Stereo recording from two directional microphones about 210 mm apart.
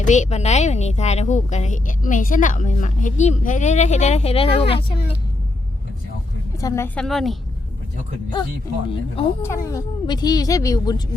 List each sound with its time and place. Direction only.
0.0 s speech: 35° left (ahead or behind)
6.6 s a woman's voice: 15° left (ahead or behind)
8.9 s speech: 25° left (ahead or behind)
9.4 s speech: 15° left (ahead or behind)